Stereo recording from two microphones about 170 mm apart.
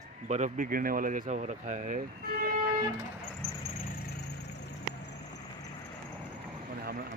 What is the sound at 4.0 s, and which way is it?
Vehicle, 75° left (ahead or behind).